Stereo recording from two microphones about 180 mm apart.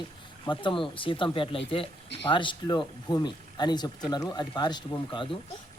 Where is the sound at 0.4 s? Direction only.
25° left (ahead or behind).